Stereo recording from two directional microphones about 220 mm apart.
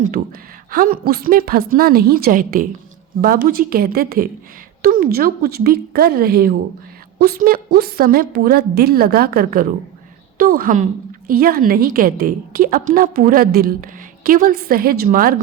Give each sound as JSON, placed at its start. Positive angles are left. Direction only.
{"t": 0.2, "sound": "a woman's voice", "side_deg": -45}